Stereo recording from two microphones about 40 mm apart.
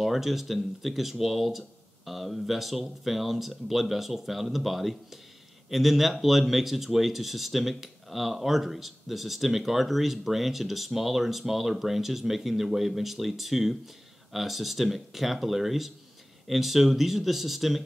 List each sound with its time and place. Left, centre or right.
0.0 s speech: centre